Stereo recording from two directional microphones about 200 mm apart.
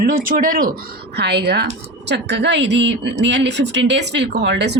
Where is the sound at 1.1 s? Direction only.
55° right (ahead or behind).